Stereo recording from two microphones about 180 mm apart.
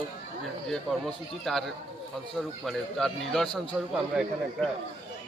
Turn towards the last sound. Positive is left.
turn(degrees=0)  # may be behind; listen again after turning